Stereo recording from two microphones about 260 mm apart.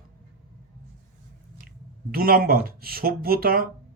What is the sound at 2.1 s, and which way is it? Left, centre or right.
Speech, right.